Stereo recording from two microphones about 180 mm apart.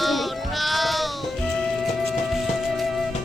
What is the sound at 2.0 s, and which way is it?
Music, centre (ahead or behind).